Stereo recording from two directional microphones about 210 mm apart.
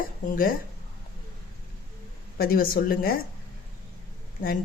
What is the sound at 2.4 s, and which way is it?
Speech, 45° left (ahead or behind).